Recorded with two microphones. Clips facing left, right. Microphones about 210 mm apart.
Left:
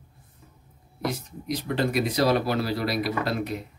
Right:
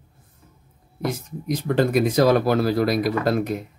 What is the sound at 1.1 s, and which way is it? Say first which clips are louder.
Speech: right 4 dB; 50° right (ahead or behind).